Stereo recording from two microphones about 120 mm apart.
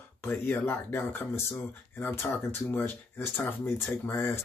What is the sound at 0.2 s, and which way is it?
Speech, 15° left (ahead or behind).